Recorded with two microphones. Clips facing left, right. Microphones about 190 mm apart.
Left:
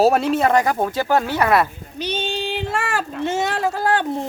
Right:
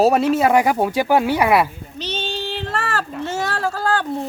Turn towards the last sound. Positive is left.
turn(degrees=20)  # may be behind; listen again after turning